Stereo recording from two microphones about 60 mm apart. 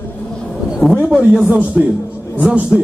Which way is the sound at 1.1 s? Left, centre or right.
Centre.